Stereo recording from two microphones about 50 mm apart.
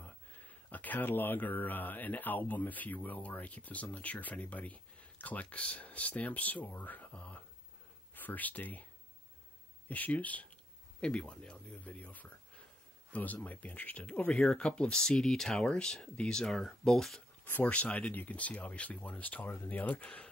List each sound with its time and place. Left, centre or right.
0.0 s speech: left
9.8 s speech: left
14.3 s speech: centre
14.6 s speech: left
15.0 s speech: centre
17.5 s speech: left
17.7 s speech: left